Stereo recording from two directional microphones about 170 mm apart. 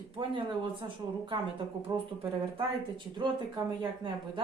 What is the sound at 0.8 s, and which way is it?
Speech, 30° right (ahead or behind).